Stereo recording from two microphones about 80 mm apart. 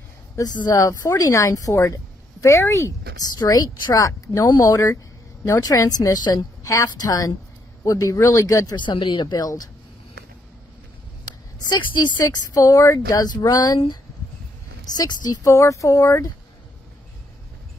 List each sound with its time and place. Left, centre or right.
0.6 s speech: left
3.3 s speech: left
6.6 s speech: left
8.8 s speech: left
11.9 s speech: left
15.0 s a woman's voice: left
15.5 s speech: left